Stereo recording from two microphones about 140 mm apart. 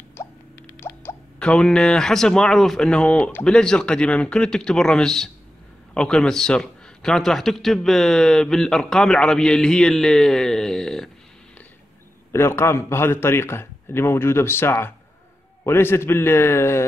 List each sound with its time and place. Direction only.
0.2 s a sound: 15° left (ahead or behind)
0.7 s a man's voice: 15° left (ahead or behind)
12.3 s a man's voice: 20° left (ahead or behind)